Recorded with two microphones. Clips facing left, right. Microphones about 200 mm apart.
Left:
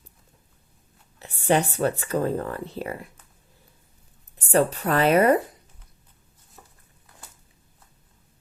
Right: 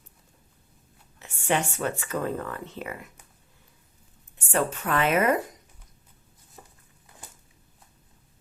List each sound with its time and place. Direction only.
1.2 s speech: 35° left (ahead or behind)
4.4 s speech: 35° left (ahead or behind)